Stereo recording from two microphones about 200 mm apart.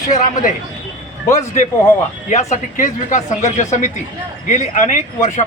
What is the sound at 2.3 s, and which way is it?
A man's voice, 35° left (ahead or behind).